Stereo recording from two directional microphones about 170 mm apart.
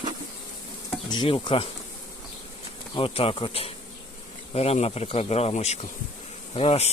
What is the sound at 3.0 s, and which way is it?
Speech, 35° left (ahead or behind).